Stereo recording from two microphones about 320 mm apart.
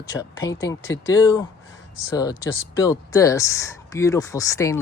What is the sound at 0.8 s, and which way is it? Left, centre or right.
Speech, left.